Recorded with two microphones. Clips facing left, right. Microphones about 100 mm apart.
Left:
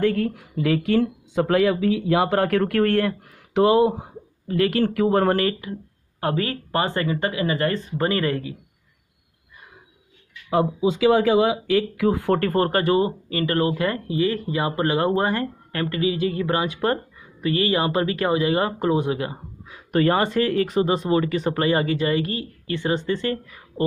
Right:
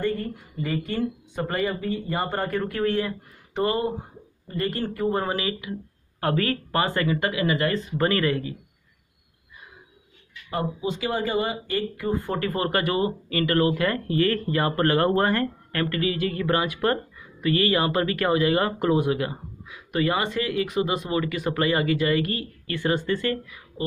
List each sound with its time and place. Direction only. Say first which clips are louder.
0.0 s speech: left 6 dB; 90° left; by 3.6 s 65° left (ahead or behind)
3.7 s speech: left 8 dB; 90° left; by 5.4 s 65° left (ahead or behind)
5.4 s speech: left 5 dB; 45° left (ahead or behind)
6.2 s speech: even; 25° left (ahead or behind)
11.1 s speech: left 7 dB; 90° left
12.4 s speech: left 4 dB; 45° left (ahead or behind); by 19.3 s 25° left (ahead or behind)
19.7 s speech: left 5 dB; 40° left (ahead or behind)